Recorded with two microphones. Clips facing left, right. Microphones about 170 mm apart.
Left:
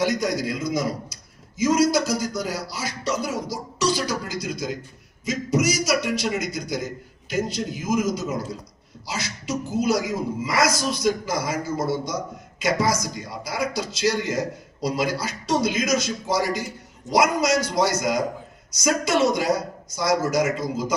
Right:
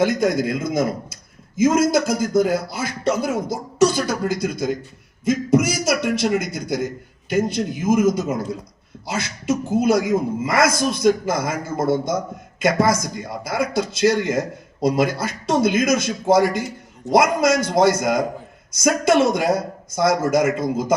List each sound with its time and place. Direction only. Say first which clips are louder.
0.0 s a man's voice: right 5 dB; 50° right (ahead or behind)